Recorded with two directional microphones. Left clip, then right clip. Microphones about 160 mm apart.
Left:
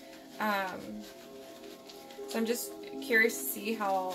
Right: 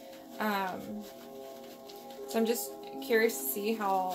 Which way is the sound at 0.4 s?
55° right (ahead or behind).